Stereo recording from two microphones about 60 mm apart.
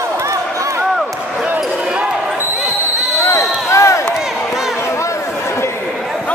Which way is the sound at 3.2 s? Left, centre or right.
Left.